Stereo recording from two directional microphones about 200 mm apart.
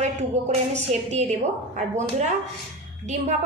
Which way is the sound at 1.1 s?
35° right (ahead or behind).